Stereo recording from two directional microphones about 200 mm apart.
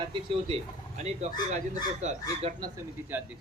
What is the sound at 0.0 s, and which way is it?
Speech, 25° right (ahead or behind).